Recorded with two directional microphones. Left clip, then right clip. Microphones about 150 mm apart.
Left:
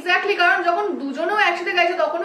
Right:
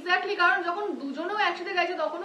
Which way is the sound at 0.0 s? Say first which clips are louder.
Left 6 dB; 15° right (ahead or behind).